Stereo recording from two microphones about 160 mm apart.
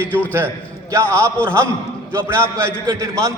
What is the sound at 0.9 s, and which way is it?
A man's voice, 15° right (ahead or behind).